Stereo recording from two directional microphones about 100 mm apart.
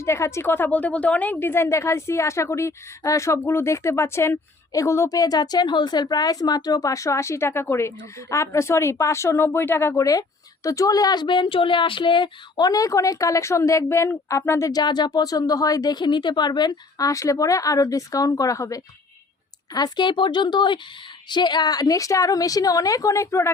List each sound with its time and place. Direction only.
0.0 s a woman's voice: 30° left (ahead or behind)
14.7 s speech: 45° left (ahead or behind)
17.1 s a woman's voice: 30° left (ahead or behind)
19.7 s a woman's voice: 45° left (ahead or behind); by 23.5 s 30° left (ahead or behind)